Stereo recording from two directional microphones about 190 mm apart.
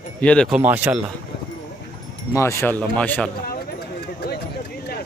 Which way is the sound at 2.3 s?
15° left (ahead or behind).